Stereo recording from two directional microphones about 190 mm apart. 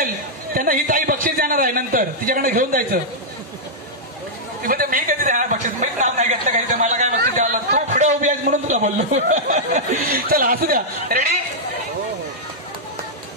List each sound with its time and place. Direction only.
0.6 s a man's voice: 45° right (ahead or behind)
4.6 s a man's voice: 45° right (ahead or behind)